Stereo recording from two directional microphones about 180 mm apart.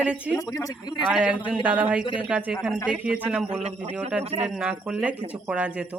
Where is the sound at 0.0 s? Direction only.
5° right (ahead or behind).